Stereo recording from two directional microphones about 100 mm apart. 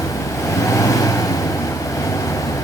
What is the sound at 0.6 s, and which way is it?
Vehicle, 35° left (ahead or behind).